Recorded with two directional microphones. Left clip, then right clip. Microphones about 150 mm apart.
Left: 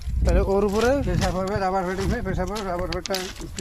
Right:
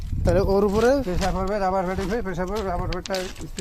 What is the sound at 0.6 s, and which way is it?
Speech, 40° right (ahead or behind).